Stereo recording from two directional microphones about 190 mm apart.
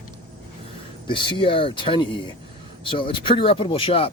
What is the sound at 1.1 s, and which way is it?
Speech, 25° left (ahead or behind).